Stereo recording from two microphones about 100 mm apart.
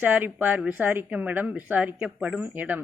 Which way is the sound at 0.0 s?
20° right (ahead or behind).